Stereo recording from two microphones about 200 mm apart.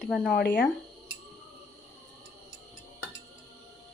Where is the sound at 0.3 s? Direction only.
50° left (ahead or behind).